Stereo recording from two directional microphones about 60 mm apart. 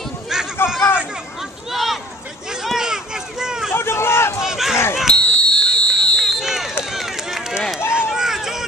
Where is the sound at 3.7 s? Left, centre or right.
Left.